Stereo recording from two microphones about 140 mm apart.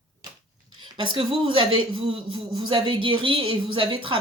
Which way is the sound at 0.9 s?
35° right (ahead or behind).